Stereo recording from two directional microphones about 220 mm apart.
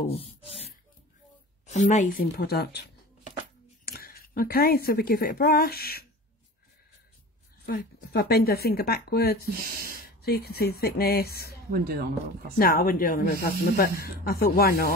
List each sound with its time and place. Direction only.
0.0 s speech: 25° left (ahead or behind)
2.3 s a woman's voice: 45° left (ahead or behind)
7.6 s speech: 45° left (ahead or behind)
9.5 s speech: 45° right (ahead or behind)
10.0 s speech: 45° left (ahead or behind)
11.7 s speech: 45° right (ahead or behind)
12.5 s speech: 40° left (ahead or behind)